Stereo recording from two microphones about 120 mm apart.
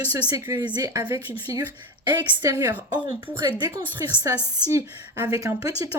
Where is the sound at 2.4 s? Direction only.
25° right (ahead or behind).